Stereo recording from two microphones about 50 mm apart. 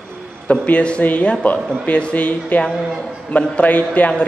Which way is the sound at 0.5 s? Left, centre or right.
Left.